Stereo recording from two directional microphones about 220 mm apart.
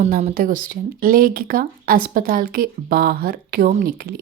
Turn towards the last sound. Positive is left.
turn(degrees=-45)  # may be behind; listen again after turning